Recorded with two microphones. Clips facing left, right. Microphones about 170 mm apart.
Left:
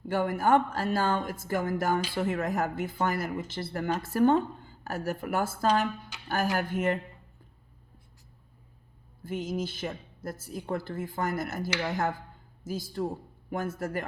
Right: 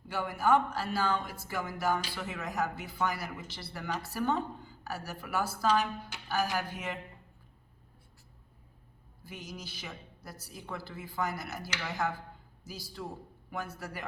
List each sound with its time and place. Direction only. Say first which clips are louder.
0.1 s a woman's voice: left 4 dB; 50° left (ahead or behind)
9.2 s a woman's voice: left 12 dB; 50° left (ahead or behind)